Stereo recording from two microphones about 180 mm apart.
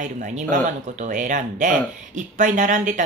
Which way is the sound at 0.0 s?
45° right (ahead or behind).